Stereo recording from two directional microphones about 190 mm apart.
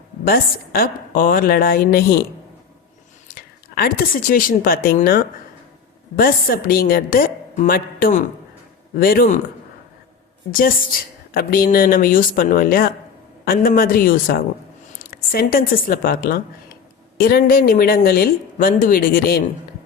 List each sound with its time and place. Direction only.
0.3 s a woman's voice: 50° left (ahead or behind)
3.3 s a woman's voice: 50° left (ahead or behind)
10.6 s a woman's voice: 50° left (ahead or behind)